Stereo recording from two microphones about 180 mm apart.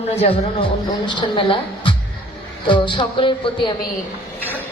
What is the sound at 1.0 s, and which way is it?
Music, 25° left (ahead or behind).